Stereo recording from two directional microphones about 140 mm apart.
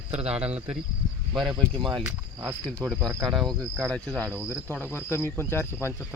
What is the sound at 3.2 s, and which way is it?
Cricket, centre (ahead or behind).